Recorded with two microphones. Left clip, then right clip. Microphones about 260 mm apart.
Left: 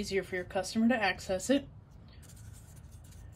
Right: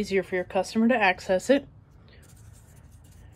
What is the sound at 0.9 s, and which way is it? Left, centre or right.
Speech, right.